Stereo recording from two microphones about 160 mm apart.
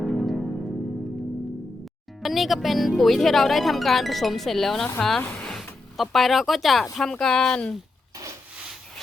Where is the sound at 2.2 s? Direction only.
Centre (ahead or behind).